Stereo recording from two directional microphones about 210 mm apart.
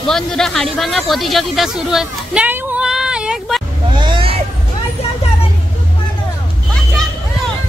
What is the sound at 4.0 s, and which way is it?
Vehicle, 25° right (ahead or behind).